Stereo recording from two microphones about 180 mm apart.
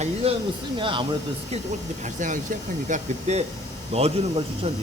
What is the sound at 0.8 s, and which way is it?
Speech, 25° right (ahead or behind).